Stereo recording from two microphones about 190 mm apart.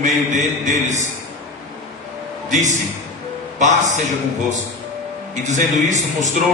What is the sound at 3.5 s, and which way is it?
Speech, 40° right (ahead or behind).